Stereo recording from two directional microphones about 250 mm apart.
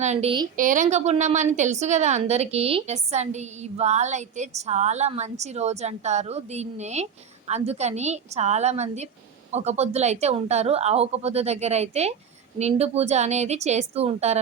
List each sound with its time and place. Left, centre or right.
0.0 s a woman's voice: right